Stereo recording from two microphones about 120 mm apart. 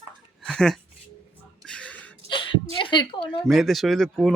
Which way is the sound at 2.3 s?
45° left (ahead or behind).